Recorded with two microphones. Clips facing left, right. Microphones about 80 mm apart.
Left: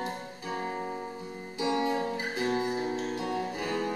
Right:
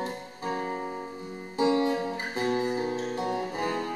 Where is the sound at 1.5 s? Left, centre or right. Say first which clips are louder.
Right 4 dB; right.